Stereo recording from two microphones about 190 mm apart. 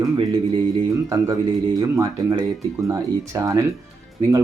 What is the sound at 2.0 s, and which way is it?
Speech, 20° right (ahead or behind).